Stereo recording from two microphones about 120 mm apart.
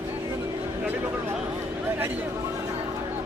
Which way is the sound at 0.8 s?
20° right (ahead or behind).